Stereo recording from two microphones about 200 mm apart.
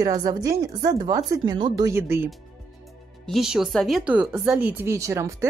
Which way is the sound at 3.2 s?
Centre (ahead or behind).